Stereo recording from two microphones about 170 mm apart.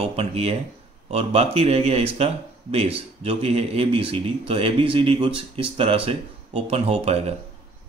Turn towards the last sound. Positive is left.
turn(degrees=-40)  # may be behind; listen again after turning